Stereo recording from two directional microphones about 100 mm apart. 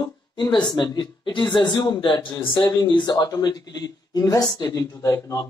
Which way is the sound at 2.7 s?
40° left (ahead or behind).